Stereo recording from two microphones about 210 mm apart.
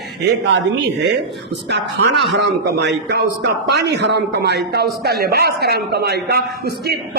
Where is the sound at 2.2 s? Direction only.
55° right (ahead or behind).